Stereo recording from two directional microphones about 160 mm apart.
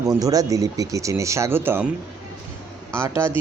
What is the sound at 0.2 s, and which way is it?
Speech, 20° right (ahead or behind).